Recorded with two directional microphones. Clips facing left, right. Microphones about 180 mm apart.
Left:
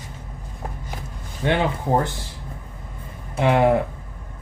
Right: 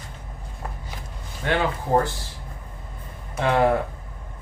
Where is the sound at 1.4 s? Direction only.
20° left (ahead or behind).